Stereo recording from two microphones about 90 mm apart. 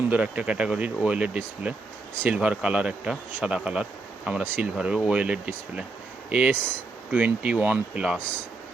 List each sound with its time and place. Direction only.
0.1 s speech: 15° right (ahead or behind)